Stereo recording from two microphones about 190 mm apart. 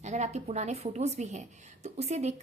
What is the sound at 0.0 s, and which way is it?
A woman's voice, 35° right (ahead or behind).